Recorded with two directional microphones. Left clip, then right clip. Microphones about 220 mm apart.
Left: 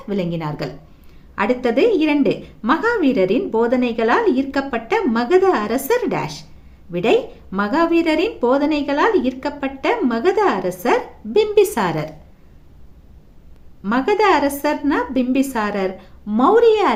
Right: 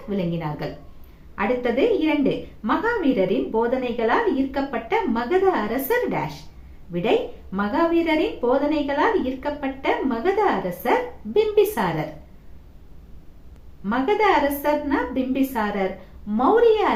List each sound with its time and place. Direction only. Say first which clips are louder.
0.1 s a woman's voice: left 4 dB; 50° left (ahead or behind)
7.5 s a woman's voice: left 4 dB; 50° left (ahead or behind)
13.8 s a woman's voice: left 4 dB; 50° left (ahead or behind)